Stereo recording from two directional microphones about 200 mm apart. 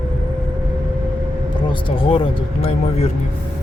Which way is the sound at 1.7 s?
25° left (ahead or behind).